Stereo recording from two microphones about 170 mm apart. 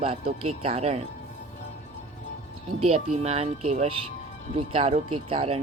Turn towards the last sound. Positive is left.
turn(degrees=-35)  # may be behind; listen again after turning